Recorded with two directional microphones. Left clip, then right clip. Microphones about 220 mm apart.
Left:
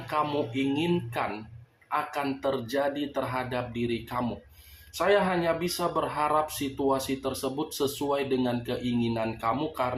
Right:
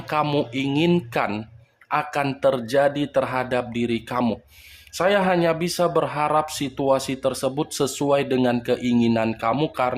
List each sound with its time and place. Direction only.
0.1 s speech: 45° right (ahead or behind)